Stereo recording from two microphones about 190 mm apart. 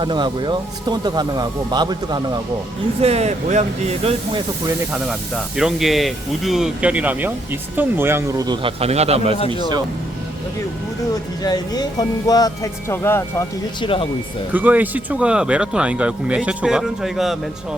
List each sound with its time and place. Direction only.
0.0 s speech: 25° right (ahead or behind)
3.0 s speech: 35° right (ahead or behind)
4.9 s speech: 5° right (ahead or behind); by 9.3 s 35° right (ahead or behind)
9.5 s speech: 20° right (ahead or behind)
11.4 s speech: 20° left (ahead or behind)
14.5 s speech: 10° right (ahead or behind)